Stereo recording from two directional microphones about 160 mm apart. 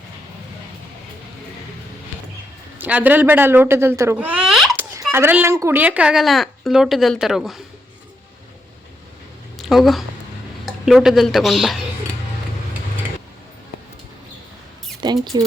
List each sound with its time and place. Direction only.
2.7 s speech: 10° right (ahead or behind)
5.1 s a woman's voice: 15° right (ahead or behind)
9.6 s a sound: centre (ahead or behind)
10.8 s a woman's voice: centre (ahead or behind)
15.0 s mouse: 25° right (ahead or behind)